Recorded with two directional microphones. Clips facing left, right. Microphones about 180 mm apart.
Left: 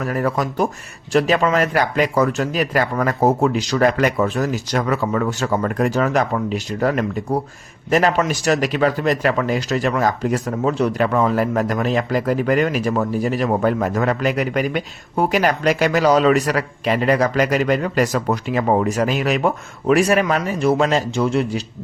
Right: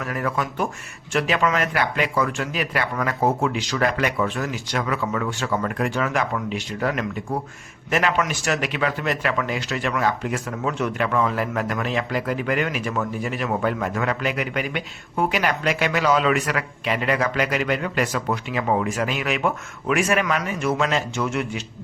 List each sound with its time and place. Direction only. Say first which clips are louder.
0.0 s a man's voice: left 5 dB; 40° left (ahead or behind)